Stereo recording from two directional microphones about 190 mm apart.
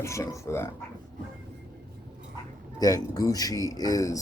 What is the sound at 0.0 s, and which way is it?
Speech, 15° left (ahead or behind).